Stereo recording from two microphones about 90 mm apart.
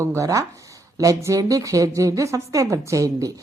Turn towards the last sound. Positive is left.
turn(degrees=-40)  # may be behind; listen again after turning